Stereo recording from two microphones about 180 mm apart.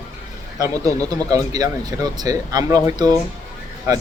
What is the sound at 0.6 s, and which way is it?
Speech, 20° right (ahead or behind).